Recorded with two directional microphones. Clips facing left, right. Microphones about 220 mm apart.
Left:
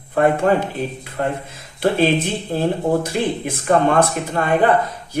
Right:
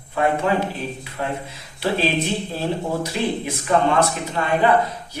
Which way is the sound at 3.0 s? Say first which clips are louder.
Left 2 dB; 50° left (ahead or behind).